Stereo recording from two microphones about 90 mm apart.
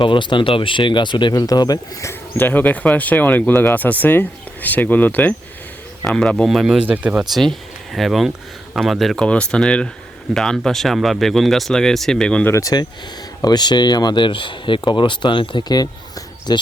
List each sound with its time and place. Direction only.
0.0 s speech: 65° left (ahead or behind); by 2.1 s 40° left (ahead or behind)
2.4 s a man's voice: 20° left (ahead or behind); by 6.8 s centre (ahead or behind)
6.8 s speech: 15° right (ahead or behind)
7.9 s speech: centre (ahead or behind)
9.1 s speech: 10° left (ahead or behind)
12.7 s speech: 45° left (ahead or behind)